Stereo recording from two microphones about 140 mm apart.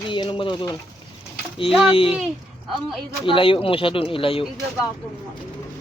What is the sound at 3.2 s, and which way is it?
Speech, 40° left (ahead or behind).